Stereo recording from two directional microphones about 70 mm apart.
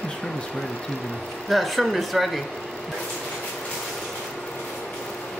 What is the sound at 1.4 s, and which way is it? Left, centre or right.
Speech, centre.